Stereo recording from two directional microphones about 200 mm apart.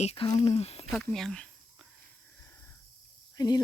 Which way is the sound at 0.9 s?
Centre (ahead or behind).